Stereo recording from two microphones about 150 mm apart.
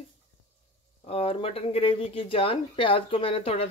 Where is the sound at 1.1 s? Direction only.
40° left (ahead or behind).